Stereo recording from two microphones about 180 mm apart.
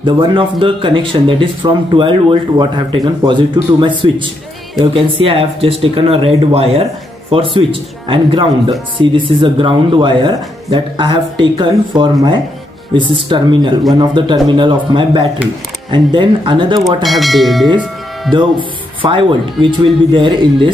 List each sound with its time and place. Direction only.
0.0 s speech: 25° right (ahead or behind)
16.8 s speech: centre (ahead or behind)
18.3 s speech: 25° right (ahead or behind)